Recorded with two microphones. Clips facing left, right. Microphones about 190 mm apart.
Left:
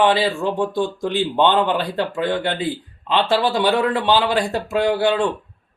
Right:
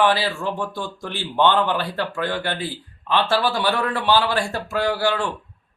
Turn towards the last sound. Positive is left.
turn(degrees=20)  # may be behind; listen again after turning